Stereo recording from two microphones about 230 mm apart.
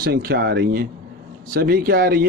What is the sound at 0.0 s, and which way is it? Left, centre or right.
A man's voice, right.